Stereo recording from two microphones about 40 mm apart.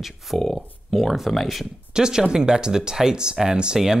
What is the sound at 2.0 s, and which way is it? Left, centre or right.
Speech, centre.